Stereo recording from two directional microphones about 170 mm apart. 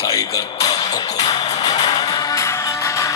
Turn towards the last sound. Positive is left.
turn(degrees=15)  # may be behind; listen again after turning